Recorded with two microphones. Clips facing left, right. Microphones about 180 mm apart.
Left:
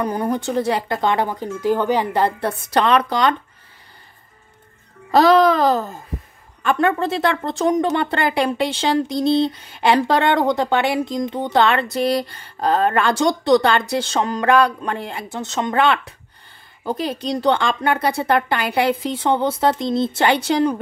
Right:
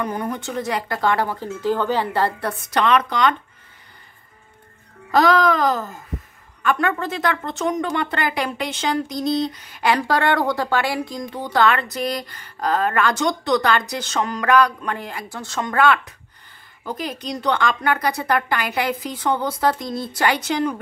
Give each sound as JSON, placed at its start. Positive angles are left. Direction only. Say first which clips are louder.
{"t": 0.0, "sound": "speech", "louder": "left 4 dB", "side_deg": 35}
{"t": 2.7, "sound": "a child's voice", "louder": "left 2 dB", "side_deg": 35}
{"t": 5.1, "sound": "a child's voice", "louder": "left 3 dB", "side_deg": 30}